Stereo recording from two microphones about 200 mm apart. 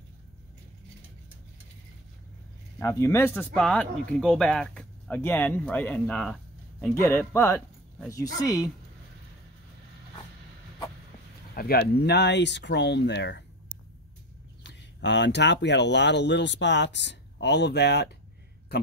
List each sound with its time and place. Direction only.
2.8 s speech: 15° left (ahead or behind)
11.5 s speech: 50° left (ahead or behind)
14.6 s speech: 60° left (ahead or behind)